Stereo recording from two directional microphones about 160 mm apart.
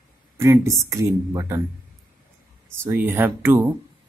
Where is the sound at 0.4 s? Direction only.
20° right (ahead or behind).